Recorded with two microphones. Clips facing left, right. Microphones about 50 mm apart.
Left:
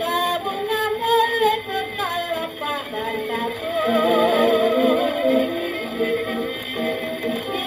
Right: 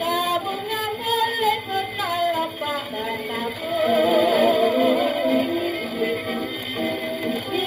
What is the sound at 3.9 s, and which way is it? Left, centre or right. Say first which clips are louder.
Music: left 1 dB; left.